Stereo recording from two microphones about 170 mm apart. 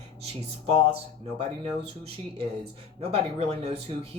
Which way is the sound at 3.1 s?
35° right (ahead or behind).